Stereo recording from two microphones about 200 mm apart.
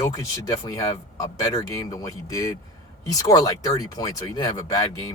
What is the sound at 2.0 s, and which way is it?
Speech, 15° left (ahead or behind).